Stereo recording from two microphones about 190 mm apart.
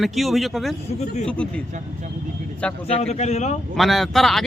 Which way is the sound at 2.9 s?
35° left (ahead or behind).